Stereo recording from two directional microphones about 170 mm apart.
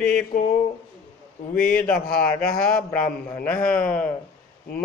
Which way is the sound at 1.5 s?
5° left (ahead or behind).